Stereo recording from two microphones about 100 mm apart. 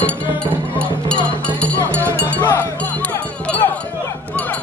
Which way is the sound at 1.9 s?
20° right (ahead or behind).